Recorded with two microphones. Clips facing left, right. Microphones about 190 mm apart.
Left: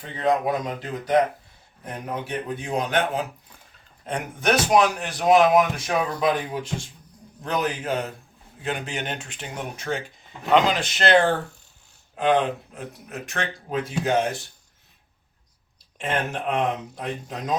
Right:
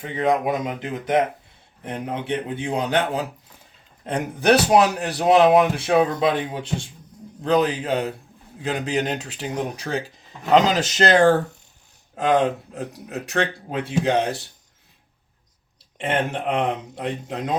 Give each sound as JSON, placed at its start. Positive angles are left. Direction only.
{"t": 0.2, "sound": "a man's voice", "side_deg": -15}
{"t": 4.1, "sound": "speech", "side_deg": -35}
{"t": 16.9, "sound": "a man's voice", "side_deg": -25}